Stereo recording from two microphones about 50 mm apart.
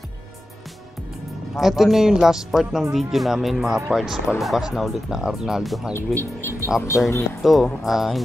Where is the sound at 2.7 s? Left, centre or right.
Centre.